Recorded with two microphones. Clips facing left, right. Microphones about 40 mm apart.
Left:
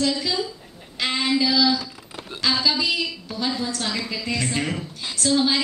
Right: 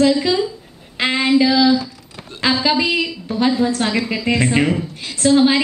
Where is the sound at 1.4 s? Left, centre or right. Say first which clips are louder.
Right 6 dB; right.